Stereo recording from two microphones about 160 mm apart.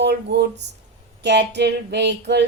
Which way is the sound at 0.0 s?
90° right.